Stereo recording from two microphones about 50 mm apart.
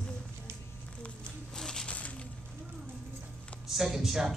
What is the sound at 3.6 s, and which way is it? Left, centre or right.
Speech, centre.